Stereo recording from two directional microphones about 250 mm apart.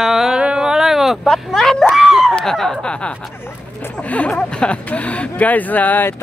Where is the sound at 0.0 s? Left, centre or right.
Centre.